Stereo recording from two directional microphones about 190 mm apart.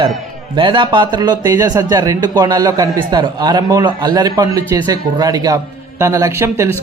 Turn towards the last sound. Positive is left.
turn(degrees=-15)  # may be behind; listen again after turning